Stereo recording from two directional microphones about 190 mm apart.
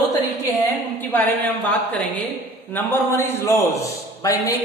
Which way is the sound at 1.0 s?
10° left (ahead or behind).